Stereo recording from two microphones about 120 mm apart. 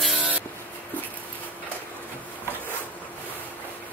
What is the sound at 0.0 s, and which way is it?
Spray, 5° right (ahead or behind).